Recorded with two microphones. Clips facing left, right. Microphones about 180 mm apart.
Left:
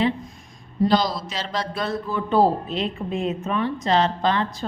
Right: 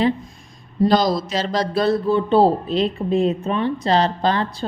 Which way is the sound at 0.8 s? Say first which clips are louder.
Right 4 dB; 45° right (ahead or behind).